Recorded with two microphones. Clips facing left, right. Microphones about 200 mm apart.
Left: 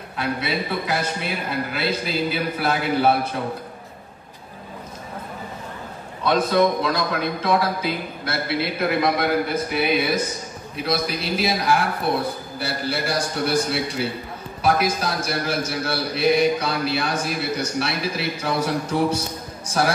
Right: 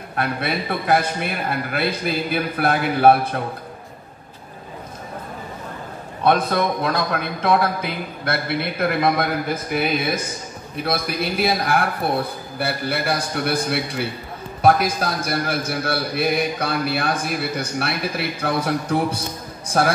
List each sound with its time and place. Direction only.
0.1 s a man's voice: 55° right (ahead or behind)
6.2 s a man's voice: 55° right (ahead or behind)
10.8 s a man's voice: 55° right (ahead or behind)